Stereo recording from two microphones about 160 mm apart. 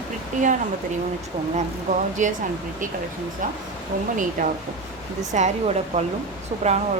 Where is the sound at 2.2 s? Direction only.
50° right (ahead or behind).